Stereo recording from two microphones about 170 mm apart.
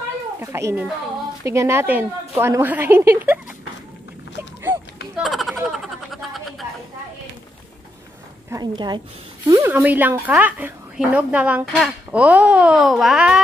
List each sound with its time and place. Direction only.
0.4 s speech: 15° right (ahead or behind)
5.1 s a sound: centre (ahead or behind)
8.5 s a woman's voice: 25° right (ahead or behind)
9.5 s speech: 15° right (ahead or behind)